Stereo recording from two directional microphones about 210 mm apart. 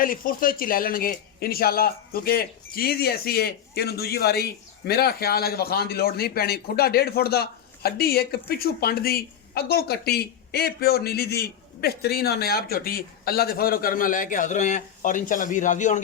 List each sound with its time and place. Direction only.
0.0 s speech: 40° left (ahead or behind)